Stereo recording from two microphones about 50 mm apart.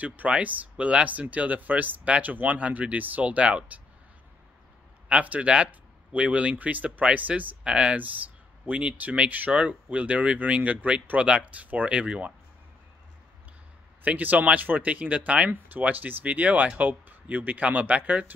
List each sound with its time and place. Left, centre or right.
0.0 s speech: right
5.0 s speech: right
14.0 s speech: right